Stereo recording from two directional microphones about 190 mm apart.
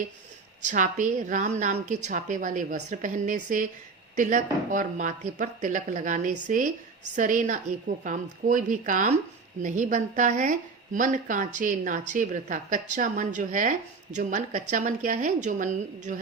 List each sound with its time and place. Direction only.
0.7 s a woman's voice: 40° right (ahead or behind)